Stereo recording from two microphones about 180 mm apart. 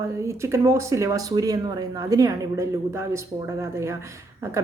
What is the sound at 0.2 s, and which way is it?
Speech, 15° right (ahead or behind).